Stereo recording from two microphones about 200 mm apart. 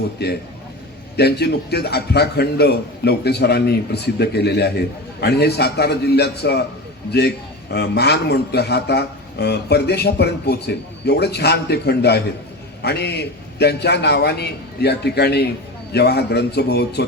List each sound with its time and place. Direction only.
0.2 s a man's voice: 55° left (ahead or behind)
7.7 s a man's voice: 55° left (ahead or behind)